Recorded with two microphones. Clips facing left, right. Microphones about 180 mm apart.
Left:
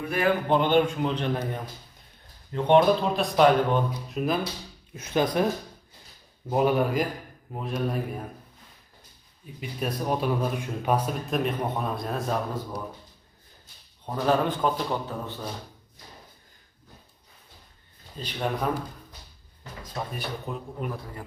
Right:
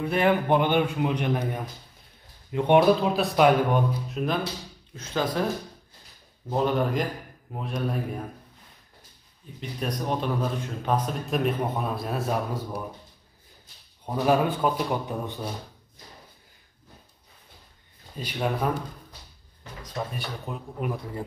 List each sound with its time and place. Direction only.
0.0 s speech: 25° right (ahead or behind)
0.5 s speech: 10° right (ahead or behind)
4.9 s speech: 15° left (ahead or behind)
6.5 s speech: 10° left (ahead or behind)
9.6 s speech: 5° left (ahead or behind)
14.0 s speech: 10° right (ahead or behind)
18.1 s speech: 10° right (ahead or behind)
20.2 s speech: centre (ahead or behind)